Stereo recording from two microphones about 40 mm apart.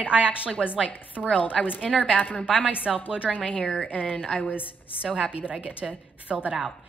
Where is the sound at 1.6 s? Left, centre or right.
Centre.